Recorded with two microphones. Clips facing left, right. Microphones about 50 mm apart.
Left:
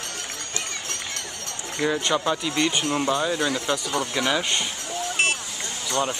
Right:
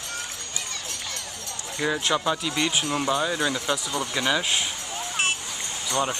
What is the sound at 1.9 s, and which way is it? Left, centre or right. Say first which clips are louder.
Speech: left 1 dB; centre.